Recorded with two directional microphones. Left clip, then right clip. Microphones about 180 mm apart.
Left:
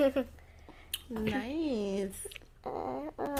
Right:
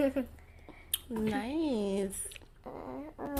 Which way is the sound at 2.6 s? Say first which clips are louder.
Left 7 dB; 65° left (ahead or behind).